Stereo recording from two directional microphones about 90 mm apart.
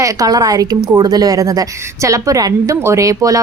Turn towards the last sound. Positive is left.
turn(degrees=-40)  # may be behind; listen again after turning